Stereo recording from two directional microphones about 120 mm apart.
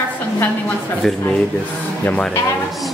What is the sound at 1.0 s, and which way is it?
Speech, centre (ahead or behind).